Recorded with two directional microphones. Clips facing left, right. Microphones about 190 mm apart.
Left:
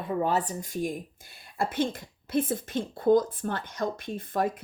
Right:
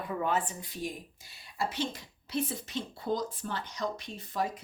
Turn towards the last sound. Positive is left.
turn(degrees=55)  # may be behind; listen again after turning